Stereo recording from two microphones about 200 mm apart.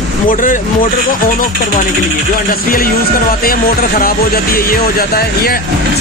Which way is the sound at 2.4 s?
45° left (ahead or behind).